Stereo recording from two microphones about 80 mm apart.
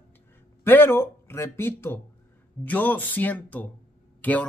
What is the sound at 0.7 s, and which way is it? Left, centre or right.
Speech, left.